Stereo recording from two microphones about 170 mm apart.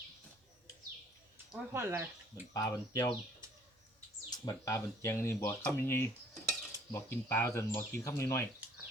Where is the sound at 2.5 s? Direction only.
20° left (ahead or behind).